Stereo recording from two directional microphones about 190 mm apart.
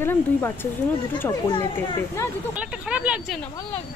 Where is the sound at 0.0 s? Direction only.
10° left (ahead or behind).